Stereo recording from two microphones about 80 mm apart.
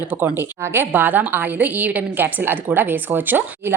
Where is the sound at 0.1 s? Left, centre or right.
Right.